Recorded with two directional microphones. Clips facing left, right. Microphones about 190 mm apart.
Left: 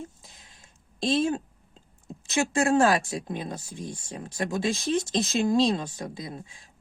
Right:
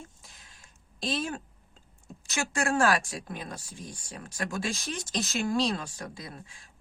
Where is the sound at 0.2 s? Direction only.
20° left (ahead or behind).